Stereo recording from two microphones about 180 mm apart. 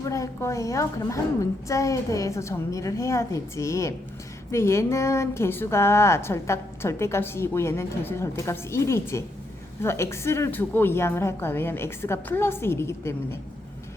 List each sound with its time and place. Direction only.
0.0 s a woman's voice: 15° left (ahead or behind)